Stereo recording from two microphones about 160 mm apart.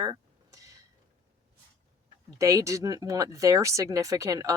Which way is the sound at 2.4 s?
20° right (ahead or behind).